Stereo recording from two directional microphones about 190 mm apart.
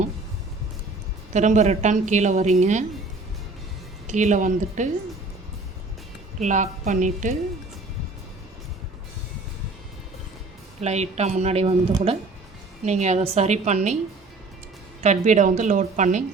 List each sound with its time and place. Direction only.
1.3 s a woman's voice: 40° right (ahead or behind)
4.0 s a woman's voice: 40° right (ahead or behind)
6.4 s a woman's voice: 40° right (ahead or behind)
10.8 s a woman's voice: 35° right (ahead or behind)
15.0 s a woman's voice: 40° right (ahead or behind)